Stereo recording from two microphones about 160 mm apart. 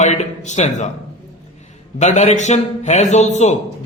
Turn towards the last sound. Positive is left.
turn(degrees=45)  # may be behind; listen again after turning